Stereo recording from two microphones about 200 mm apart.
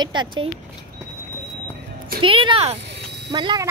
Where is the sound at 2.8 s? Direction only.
55° right (ahead or behind).